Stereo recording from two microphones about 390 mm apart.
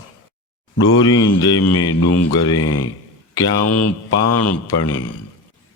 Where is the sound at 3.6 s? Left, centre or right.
Left.